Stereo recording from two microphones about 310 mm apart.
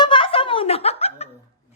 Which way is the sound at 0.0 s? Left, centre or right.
Centre.